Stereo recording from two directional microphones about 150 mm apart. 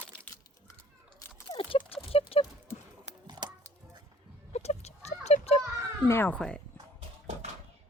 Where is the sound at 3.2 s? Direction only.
30° right (ahead or behind).